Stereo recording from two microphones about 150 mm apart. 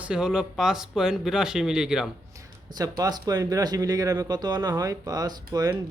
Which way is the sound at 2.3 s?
25° right (ahead or behind).